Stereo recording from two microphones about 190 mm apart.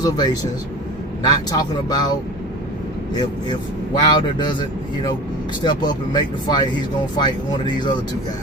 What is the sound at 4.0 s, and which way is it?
Speech, 25° left (ahead or behind).